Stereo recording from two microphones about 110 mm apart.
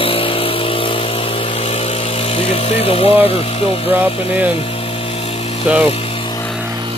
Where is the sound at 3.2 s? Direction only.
65° left (ahead or behind).